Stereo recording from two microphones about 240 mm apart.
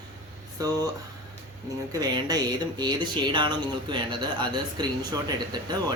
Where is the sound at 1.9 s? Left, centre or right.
Centre.